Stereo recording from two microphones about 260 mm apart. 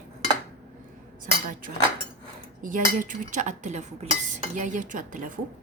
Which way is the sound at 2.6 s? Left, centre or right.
Right.